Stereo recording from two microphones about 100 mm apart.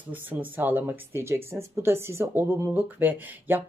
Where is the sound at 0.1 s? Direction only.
15° right (ahead or behind).